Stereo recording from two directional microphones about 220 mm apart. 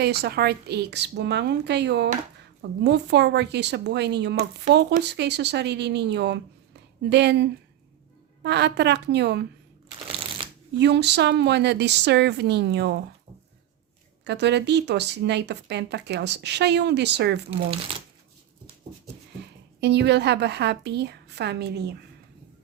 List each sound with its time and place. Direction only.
0.0 s speech: 45° right (ahead or behind)
10.1 s shuffling cards: 25° right (ahead or behind)
10.8 s speech: 50° right (ahead or behind)
14.3 s speech: 50° right (ahead or behind)
19.8 s speech: 50° right (ahead or behind)